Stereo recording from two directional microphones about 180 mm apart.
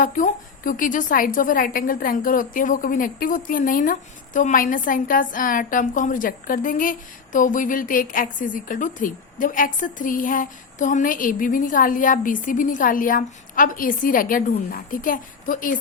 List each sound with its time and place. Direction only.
0.0 s a woman's voice: 50° left (ahead or behind)